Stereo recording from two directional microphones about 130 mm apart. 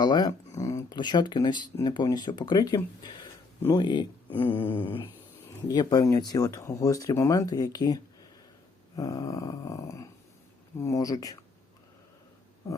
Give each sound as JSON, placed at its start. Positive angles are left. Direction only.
{"t": 0.0, "sound": "speech", "side_deg": 30}
{"t": 0.9, "sound": "speech", "side_deg": 35}
{"t": 5.6, "sound": "speech", "side_deg": 30}
{"t": 9.0, "sound": "speech", "side_deg": 25}